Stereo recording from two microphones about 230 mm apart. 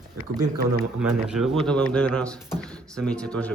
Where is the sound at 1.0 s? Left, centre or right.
Centre.